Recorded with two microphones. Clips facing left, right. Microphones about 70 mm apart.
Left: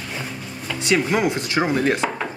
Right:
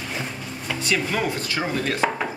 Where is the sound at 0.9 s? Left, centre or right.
Centre.